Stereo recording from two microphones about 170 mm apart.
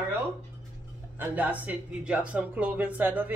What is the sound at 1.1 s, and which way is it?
Speech, 10° right (ahead or behind).